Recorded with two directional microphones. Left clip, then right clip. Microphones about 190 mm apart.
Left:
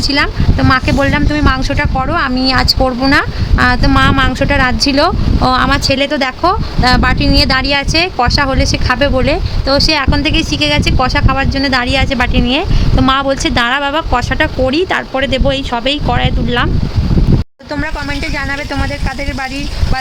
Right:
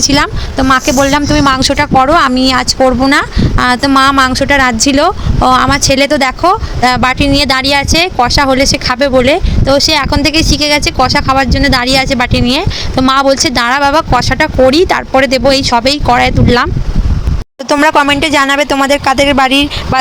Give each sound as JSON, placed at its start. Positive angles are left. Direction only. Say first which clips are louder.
{"t": 0.7, "sound": "speech", "louder": "right 4 dB", "side_deg": -20}
{"t": 1.1, "sound": "speech", "louder": "right 5 dB", "side_deg": -35}
{"t": 17.7, "sound": "speech", "louder": "right 13 dB", "side_deg": -40}